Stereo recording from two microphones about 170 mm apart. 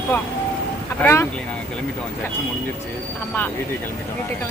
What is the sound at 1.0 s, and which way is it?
Speech, 15° left (ahead or behind).